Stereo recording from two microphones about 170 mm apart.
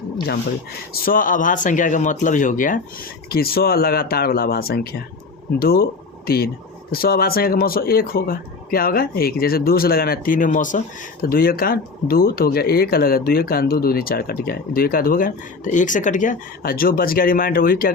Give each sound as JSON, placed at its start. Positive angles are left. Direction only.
{"t": 1.0, "sound": "speech", "side_deg": 55}
{"t": 3.2, "sound": "speech", "side_deg": 65}